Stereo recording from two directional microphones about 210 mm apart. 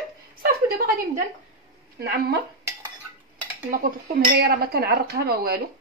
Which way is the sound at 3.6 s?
45° right (ahead or behind).